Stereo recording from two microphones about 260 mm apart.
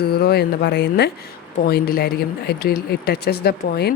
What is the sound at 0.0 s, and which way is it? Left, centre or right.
A woman's voice, left.